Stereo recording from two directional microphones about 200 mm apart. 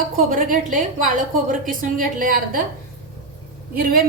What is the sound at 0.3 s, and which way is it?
A woman's voice, 45° right (ahead or behind).